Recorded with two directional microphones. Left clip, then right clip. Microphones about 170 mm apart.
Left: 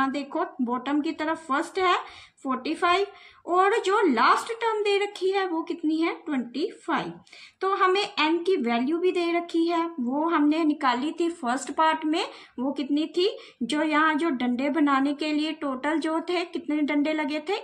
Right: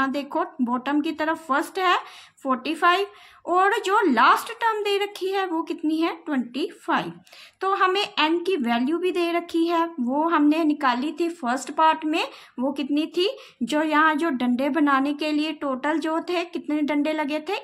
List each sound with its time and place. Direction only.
0.0 s speech: 40° right (ahead or behind)